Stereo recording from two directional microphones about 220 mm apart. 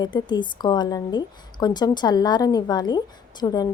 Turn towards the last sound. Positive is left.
turn(degrees=20)  # may be behind; listen again after turning